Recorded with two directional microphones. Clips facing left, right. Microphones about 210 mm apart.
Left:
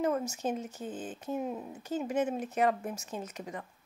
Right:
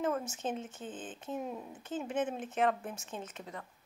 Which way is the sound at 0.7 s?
40° left (ahead or behind).